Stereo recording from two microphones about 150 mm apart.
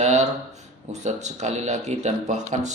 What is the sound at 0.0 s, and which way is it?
Speech, 50° right (ahead or behind).